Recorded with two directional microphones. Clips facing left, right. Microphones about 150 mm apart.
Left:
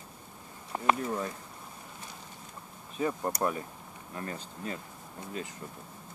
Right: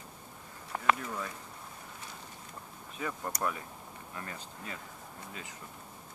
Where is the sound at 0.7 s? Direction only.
25° left (ahead or behind).